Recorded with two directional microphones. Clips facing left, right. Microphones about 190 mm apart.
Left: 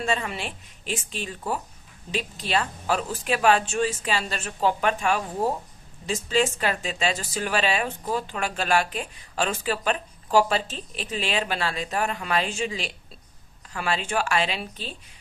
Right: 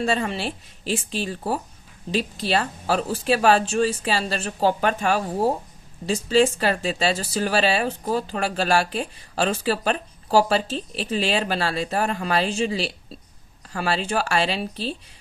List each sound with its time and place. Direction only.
0.0 s speech: 35° right (ahead or behind)